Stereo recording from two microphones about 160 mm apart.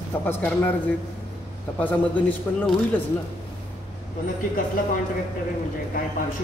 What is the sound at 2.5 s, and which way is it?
Speech, 15° left (ahead or behind).